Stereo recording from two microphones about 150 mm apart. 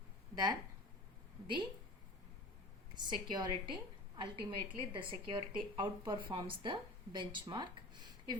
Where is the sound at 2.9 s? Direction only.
30° right (ahead or behind).